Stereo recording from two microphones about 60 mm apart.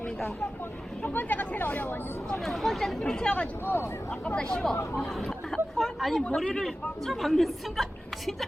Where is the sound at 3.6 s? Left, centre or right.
Left.